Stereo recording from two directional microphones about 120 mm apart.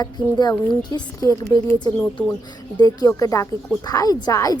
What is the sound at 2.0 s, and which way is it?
Speech, 15° left (ahead or behind).